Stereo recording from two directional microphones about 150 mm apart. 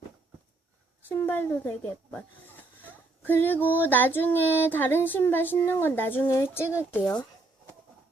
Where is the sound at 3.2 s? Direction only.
15° left (ahead or behind).